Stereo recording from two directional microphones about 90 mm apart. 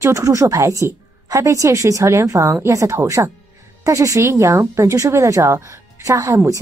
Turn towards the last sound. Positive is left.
turn(degrees=-35)  # may be behind; listen again after turning